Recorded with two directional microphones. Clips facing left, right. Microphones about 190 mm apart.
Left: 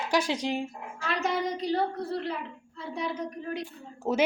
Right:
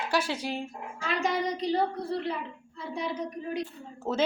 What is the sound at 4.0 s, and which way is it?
Speech, 15° left (ahead or behind).